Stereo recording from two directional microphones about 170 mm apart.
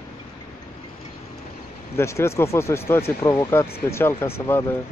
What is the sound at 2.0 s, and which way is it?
Speech, 15° left (ahead or behind).